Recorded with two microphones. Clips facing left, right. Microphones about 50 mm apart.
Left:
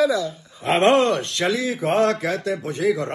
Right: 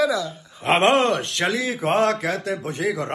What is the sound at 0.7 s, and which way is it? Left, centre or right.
A man's voice, right.